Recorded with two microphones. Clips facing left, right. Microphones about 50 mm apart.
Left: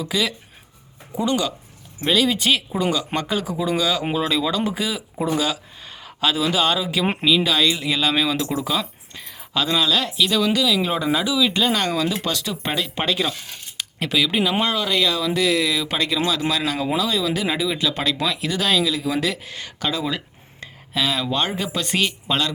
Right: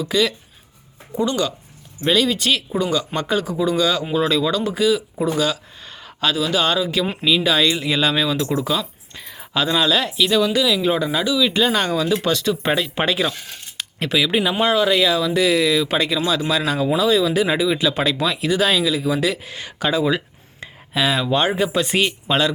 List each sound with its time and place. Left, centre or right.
0.0 s speech: centre
6.3 s speech: centre
6.6 s speech: centre
7.3 s speech: centre